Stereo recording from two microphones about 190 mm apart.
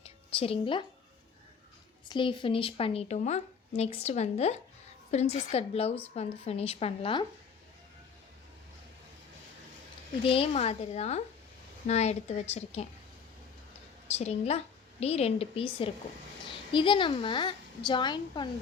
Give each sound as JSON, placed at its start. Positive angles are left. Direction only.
{"t": 0.0, "sound": "a sound", "side_deg": 30}
{"t": 2.0, "sound": "a woman's voice", "side_deg": 25}
{"t": 10.2, "sound": "a woman's voice", "side_deg": 30}
{"t": 14.1, "sound": "a woman's voice", "side_deg": 35}